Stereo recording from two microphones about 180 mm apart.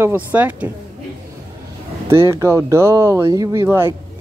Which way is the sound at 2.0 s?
15° right (ahead or behind).